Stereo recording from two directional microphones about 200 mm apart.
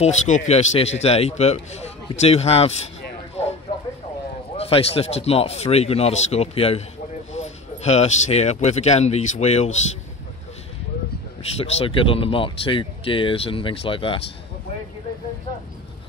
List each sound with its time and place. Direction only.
0.0 s speech: 35° left (ahead or behind)
4.6 s speech: 30° left (ahead or behind)
11.5 s speech: 30° left (ahead or behind)